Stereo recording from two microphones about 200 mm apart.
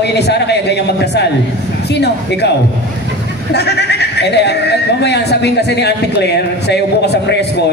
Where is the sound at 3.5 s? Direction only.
55° left (ahead or behind).